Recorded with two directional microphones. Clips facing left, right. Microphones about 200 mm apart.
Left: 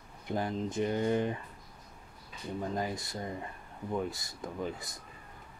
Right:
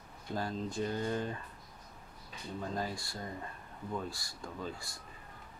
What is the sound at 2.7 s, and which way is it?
Speech, 20° left (ahead or behind).